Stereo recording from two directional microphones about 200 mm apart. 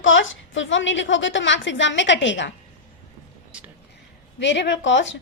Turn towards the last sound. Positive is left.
turn(degrees=65)  # may be behind; listen again after turning